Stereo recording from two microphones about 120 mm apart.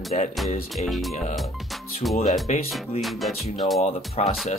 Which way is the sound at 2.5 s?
90° left.